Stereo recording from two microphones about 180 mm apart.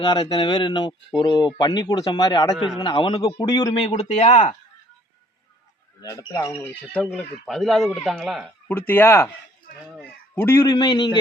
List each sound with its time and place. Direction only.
0.0 s speech: 25° left (ahead or behind)
3.8 s speech: 35° left (ahead or behind)
6.0 s speech: 20° left (ahead or behind)
9.8 s speech: centre (ahead or behind)
10.3 s speech: 15° left (ahead or behind)
10.7 s speech: 25° left (ahead or behind)